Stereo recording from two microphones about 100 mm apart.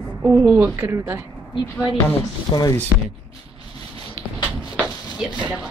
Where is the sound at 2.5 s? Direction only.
40° left (ahead or behind).